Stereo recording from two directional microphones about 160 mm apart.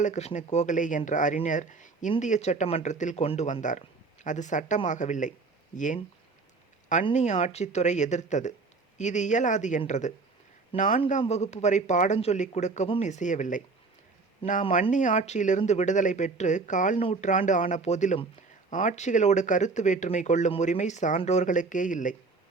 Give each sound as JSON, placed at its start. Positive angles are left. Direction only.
{"t": 0.0, "sound": "speech", "side_deg": 45}
{"t": 7.1, "sound": "a man's voice", "side_deg": 45}
{"t": 11.2, "sound": "speech", "side_deg": 45}
{"t": 14.7, "sound": "speech", "side_deg": 50}